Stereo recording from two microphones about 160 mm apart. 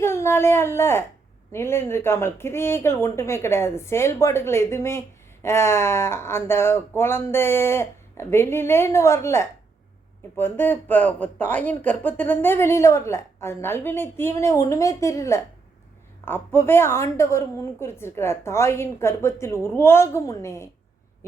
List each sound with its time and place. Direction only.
0.0 s speech: 15° left (ahead or behind)